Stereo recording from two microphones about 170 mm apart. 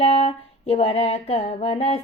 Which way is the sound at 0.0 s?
35° left (ahead or behind).